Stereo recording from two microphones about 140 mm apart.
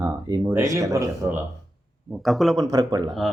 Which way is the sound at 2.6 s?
25° right (ahead or behind).